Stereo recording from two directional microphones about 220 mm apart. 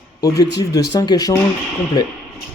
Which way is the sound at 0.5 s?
15° left (ahead or behind).